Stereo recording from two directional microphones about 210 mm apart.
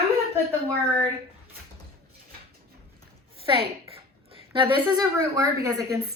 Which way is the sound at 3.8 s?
25° right (ahead or behind).